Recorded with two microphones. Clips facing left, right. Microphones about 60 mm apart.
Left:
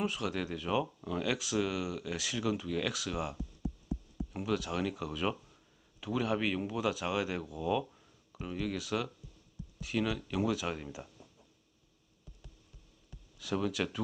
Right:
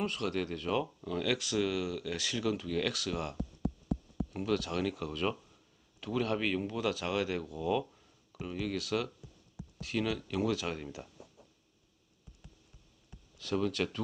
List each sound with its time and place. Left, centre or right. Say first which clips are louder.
0.0 s speech: right 1 dB; centre
3.6 s a sound: right 5 dB; right
4.3 s speech: right 1 dB; centre
13.4 s speech: right 1 dB; centre